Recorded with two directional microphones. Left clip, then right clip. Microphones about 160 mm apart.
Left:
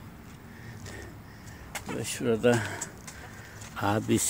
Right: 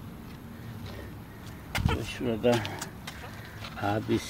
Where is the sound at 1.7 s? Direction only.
50° right (ahead or behind).